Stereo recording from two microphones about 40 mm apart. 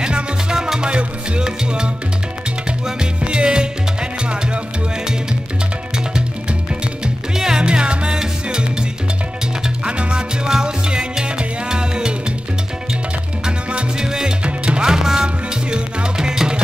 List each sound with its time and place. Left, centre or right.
0.0 s salsa music: right
0.8 s music: right
3.0 s music: right
7.3 s music: centre
7.6 s music: right
9.8 s music: right
13.7 s music: right
14.0 s music: centre
14.4 s music: right
14.9 s music: centre